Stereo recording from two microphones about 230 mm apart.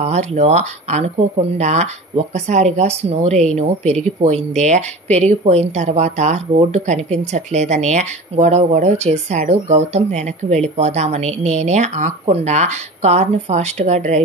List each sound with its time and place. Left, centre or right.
0.0 s speech: right